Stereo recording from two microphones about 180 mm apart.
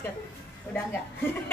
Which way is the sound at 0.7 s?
10° left (ahead or behind).